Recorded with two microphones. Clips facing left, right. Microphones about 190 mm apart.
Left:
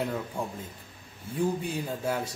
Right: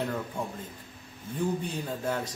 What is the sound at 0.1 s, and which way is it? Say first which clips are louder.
Speech: even; 10° left (ahead or behind).